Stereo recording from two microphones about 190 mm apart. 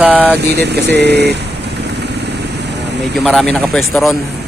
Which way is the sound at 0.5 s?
60° right (ahead or behind).